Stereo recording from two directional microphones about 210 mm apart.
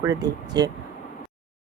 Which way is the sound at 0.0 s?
15° right (ahead or behind).